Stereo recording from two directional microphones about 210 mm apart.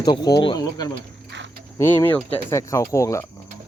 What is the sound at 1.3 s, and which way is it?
Cricket, 60° right (ahead or behind).